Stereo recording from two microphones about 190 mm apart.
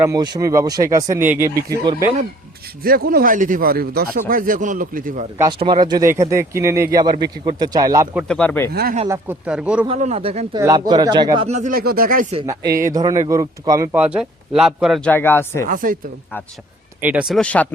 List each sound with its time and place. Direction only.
0.0 s speech: 20° right (ahead or behind)
2.8 s speech: 50° right (ahead or behind)
5.4 s speech: 25° right (ahead or behind)
8.3 s speech: 10° left (ahead or behind)
8.7 s speech: 55° right (ahead or behind)
9.0 s speech: 15° right (ahead or behind)
9.8 s speech: 35° right (ahead or behind)
11.4 s speech: 40° right (ahead or behind)
12.7 s speech: 20° right (ahead or behind); by 15.1 s centre (ahead or behind)
15.1 s speech: 10° left (ahead or behind)
15.6 s speech: 45° right (ahead or behind)
17.0 s speech: 10° right (ahead or behind)